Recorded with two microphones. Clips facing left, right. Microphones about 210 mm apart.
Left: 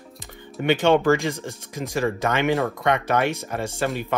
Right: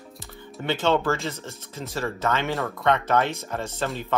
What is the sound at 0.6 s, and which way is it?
Speech, 15° left (ahead or behind).